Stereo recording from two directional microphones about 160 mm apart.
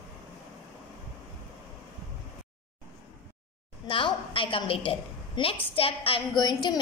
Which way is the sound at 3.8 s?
30° left (ahead or behind).